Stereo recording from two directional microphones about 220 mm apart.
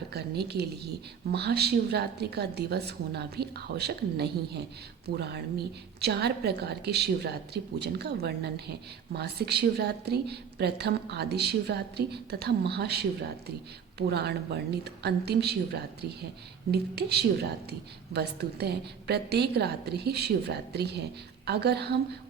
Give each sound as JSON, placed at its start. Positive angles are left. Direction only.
{"t": 0.1, "sound": "a woman's voice", "side_deg": -45}
{"t": 14.1, "sound": "a woman's voice", "side_deg": -50}